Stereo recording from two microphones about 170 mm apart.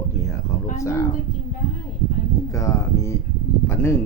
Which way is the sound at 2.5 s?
20° left (ahead or behind).